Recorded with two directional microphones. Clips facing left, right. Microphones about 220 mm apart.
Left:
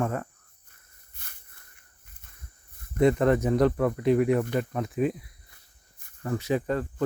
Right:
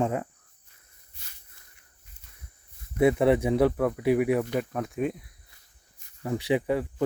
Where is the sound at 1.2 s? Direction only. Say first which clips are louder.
Left 4 dB; 55° left (ahead or behind).